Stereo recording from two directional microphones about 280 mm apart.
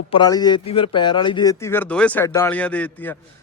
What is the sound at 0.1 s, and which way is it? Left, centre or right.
Speech, centre.